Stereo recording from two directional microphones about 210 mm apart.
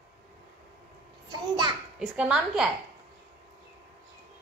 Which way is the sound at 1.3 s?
20° right (ahead or behind).